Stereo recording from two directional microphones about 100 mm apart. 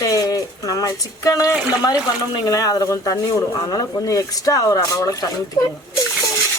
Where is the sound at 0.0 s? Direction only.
40° left (ahead or behind).